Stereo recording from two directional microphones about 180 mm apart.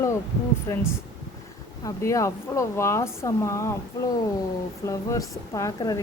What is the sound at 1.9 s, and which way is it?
A woman's voice, 15° left (ahead or behind).